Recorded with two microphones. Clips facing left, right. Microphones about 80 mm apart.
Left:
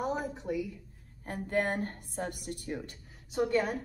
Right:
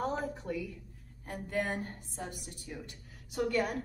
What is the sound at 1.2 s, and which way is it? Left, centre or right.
A woman's voice, left.